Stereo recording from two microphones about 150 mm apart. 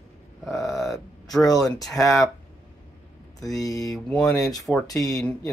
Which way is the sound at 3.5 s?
25° left (ahead or behind).